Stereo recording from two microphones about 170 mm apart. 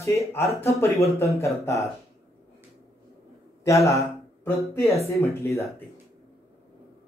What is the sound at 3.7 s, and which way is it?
Speech, 20° left (ahead or behind).